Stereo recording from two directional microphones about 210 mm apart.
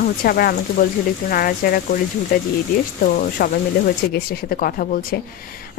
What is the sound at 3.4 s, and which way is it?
A woman's voice, 45° left (ahead or behind).